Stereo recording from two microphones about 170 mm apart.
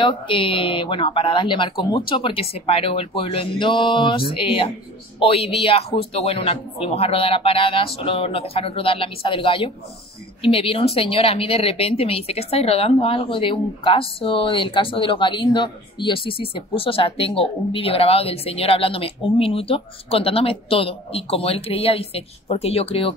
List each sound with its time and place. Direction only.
0.0 s speech: 30° left (ahead or behind)